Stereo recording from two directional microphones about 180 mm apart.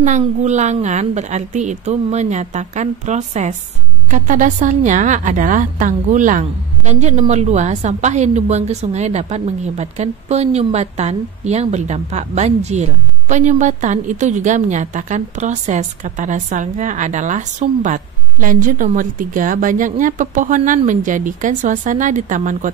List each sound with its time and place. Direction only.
0.0 s a woman's voice: 40° right (ahead or behind)